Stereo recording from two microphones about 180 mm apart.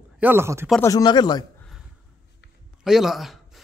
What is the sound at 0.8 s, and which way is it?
Speech, 20° left (ahead or behind).